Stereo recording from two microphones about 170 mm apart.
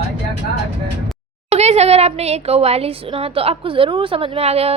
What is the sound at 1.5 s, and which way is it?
A woman's voice, 40° right (ahead or behind).